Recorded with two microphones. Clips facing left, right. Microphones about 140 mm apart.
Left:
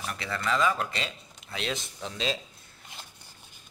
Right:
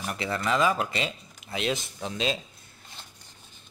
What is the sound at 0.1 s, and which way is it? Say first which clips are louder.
Speech: right 3 dB; 20° right (ahead or behind).